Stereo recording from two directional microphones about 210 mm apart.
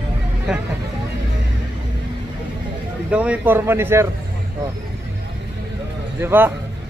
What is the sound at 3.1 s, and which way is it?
Speech, 5° right (ahead or behind).